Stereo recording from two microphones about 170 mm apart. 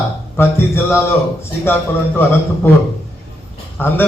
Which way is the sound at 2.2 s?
10° left (ahead or behind).